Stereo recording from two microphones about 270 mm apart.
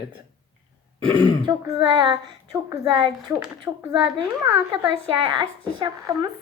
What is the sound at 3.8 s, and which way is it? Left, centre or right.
Speech, centre.